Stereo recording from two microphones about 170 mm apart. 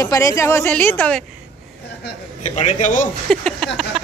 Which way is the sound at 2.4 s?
45° left (ahead or behind).